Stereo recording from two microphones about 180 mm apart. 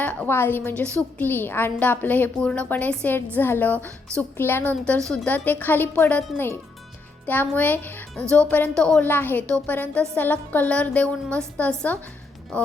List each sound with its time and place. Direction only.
0.0 s speech: 10° left (ahead or behind)